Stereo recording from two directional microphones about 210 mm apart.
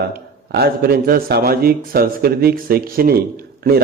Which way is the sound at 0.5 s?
45° right (ahead or behind).